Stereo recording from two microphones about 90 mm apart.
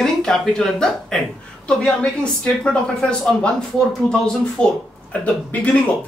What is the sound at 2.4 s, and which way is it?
Speech, 10° left (ahead or behind).